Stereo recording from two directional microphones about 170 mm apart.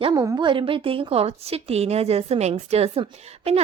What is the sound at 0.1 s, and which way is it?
A woman's voice, 20° right (ahead or behind).